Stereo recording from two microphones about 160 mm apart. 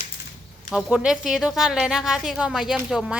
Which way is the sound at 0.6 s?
5° right (ahead or behind).